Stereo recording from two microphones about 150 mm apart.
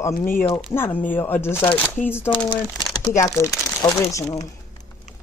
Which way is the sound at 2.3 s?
30° left (ahead or behind).